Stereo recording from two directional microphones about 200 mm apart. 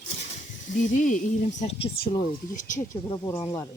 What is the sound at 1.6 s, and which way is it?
Speech, 25° left (ahead or behind).